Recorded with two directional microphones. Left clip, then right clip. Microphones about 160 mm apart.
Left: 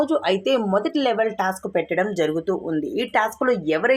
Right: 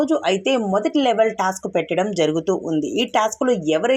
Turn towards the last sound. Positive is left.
turn(degrees=-20)  # may be behind; listen again after turning